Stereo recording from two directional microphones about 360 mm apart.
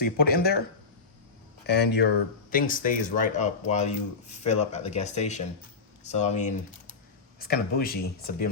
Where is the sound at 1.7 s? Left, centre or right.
Left.